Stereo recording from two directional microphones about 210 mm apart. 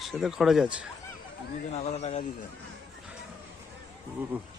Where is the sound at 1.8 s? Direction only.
30° left (ahead or behind).